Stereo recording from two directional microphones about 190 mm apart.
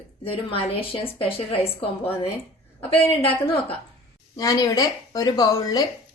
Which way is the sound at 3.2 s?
30° left (ahead or behind).